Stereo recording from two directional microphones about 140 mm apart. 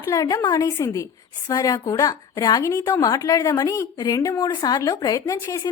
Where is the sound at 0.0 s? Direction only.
25° left (ahead or behind).